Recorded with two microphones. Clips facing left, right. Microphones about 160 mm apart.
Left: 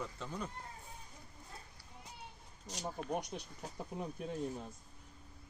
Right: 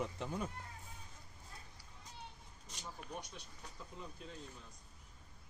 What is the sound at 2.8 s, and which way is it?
Speech, 45° left (ahead or behind).